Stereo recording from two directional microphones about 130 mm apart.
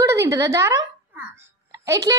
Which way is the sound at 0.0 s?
25° right (ahead or behind).